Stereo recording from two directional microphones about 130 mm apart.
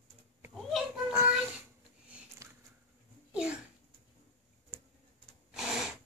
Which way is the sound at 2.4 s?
25° right (ahead or behind).